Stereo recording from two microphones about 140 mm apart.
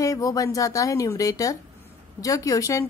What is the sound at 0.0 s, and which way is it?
A woman's voice, 25° left (ahead or behind).